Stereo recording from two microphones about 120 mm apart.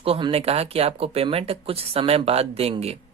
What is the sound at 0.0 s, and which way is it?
A man's voice, 50° right (ahead or behind).